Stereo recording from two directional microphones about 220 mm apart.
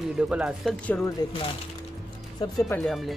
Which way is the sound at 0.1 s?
5° right (ahead or behind).